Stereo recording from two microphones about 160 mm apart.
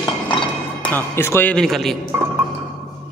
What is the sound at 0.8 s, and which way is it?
A man's voice, 15° left (ahead or behind).